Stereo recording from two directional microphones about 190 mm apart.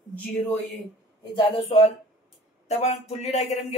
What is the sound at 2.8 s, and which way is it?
Speech, 35° left (ahead or behind).